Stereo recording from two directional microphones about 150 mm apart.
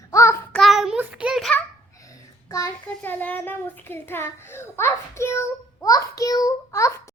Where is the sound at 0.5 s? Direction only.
Centre (ahead or behind).